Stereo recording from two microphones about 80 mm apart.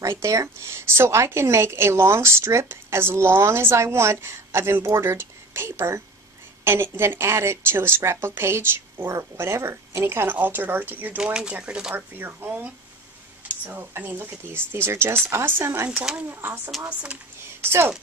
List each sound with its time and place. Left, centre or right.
0.0 s a woman's voice: right
11.1 s speech: centre
11.9 s speech: right
13.7 s a woman's voice: right